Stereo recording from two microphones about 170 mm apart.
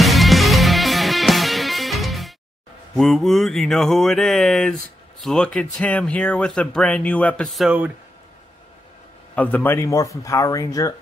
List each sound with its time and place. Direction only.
0.0 s music: centre (ahead or behind)
3.0 s speech: centre (ahead or behind)
9.3 s speech: 10° left (ahead or behind)